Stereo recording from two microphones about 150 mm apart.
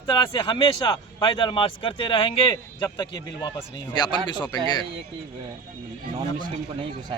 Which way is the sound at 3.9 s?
30° left (ahead or behind).